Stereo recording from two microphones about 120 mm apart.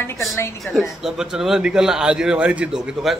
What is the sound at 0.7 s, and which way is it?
Speech, 20° left (ahead or behind).